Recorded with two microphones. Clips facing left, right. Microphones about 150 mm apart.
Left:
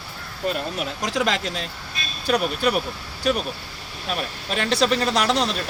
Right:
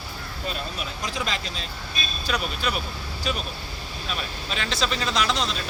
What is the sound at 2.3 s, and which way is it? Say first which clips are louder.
Speech: left 7 dB; 60° left (ahead or behind).